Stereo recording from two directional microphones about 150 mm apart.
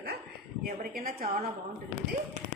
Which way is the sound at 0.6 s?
75° right (ahead or behind).